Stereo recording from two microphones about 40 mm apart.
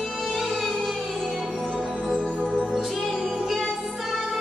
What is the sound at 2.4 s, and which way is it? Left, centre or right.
Music, left.